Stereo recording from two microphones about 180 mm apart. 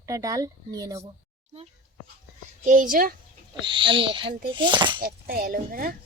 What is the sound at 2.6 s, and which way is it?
Speech, 45° right (ahead or behind).